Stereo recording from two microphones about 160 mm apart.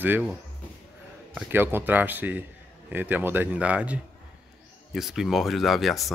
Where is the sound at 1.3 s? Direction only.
15° right (ahead or behind).